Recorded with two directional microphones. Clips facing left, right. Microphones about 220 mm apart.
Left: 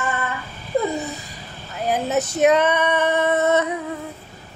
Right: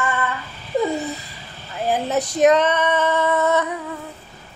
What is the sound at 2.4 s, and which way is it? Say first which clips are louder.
Female singing: right 1 dB; 10° left (ahead or behind).